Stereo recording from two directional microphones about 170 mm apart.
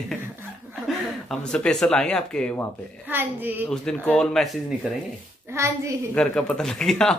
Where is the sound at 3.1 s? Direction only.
10° right (ahead or behind).